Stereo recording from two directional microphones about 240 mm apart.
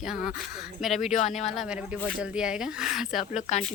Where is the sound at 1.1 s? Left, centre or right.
Left.